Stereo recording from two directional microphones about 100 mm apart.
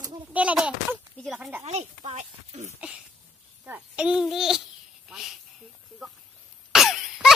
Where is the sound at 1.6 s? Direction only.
90° right.